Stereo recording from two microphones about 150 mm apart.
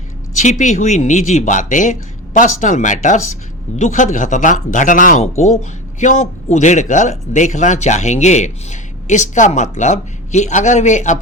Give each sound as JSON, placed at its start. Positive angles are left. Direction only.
{"t": 0.3, "sound": "a man's voice", "side_deg": 55}